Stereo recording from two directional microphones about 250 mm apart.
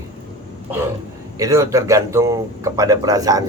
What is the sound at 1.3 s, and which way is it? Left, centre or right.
Speech, centre.